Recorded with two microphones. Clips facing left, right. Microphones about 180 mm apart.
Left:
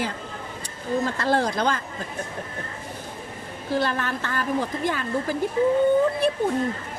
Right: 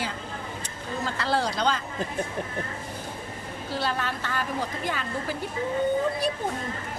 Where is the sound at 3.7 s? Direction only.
50° left (ahead or behind).